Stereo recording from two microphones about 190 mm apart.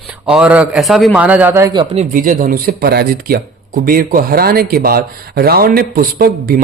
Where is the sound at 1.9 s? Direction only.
45° right (ahead or behind).